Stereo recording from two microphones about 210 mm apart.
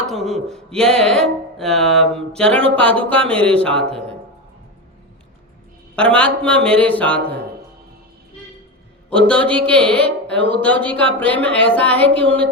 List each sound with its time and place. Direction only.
0.1 s speech: centre (ahead or behind)
3.8 s a man's voice: 30° right (ahead or behind)
6.0 s speech: 5° left (ahead or behind)
9.0 s a man's voice: 5° left (ahead or behind)
12.0 s music: 25° right (ahead or behind)